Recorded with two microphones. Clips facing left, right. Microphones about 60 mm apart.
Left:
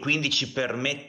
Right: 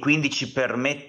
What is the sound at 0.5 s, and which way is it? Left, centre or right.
Speech, right.